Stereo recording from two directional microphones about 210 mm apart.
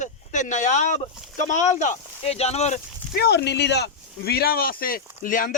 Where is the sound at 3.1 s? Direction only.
50° left (ahead or behind).